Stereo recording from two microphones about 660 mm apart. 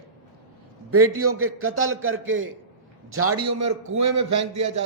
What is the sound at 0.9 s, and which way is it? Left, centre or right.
A man's voice, centre.